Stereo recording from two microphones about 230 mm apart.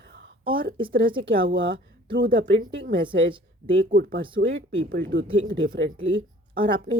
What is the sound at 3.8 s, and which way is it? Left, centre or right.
Speech, right.